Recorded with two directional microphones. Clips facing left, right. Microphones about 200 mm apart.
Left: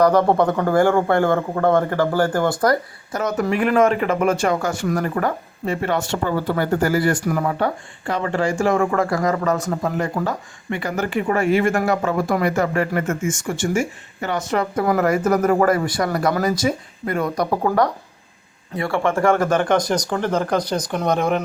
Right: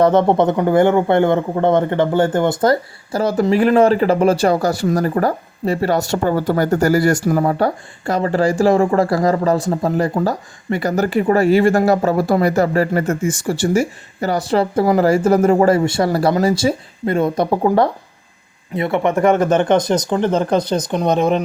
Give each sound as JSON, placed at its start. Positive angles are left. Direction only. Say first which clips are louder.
{"t": 0.0, "sound": "speech", "louder": "right 2 dB", "side_deg": -25}